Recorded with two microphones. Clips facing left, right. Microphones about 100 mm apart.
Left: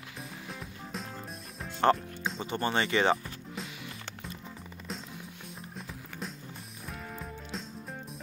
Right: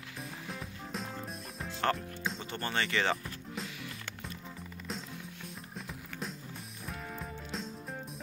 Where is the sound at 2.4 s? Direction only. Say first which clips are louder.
Left 7 dB; 20° left (ahead or behind).